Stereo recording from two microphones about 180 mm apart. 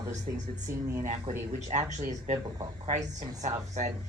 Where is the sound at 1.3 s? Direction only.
40° right (ahead or behind).